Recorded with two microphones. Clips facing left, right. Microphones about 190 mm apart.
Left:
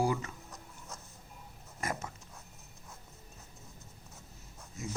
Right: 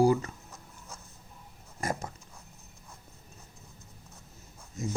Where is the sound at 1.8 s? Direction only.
35° right (ahead or behind).